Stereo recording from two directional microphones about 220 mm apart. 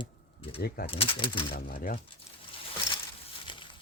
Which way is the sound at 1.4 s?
45° left (ahead or behind).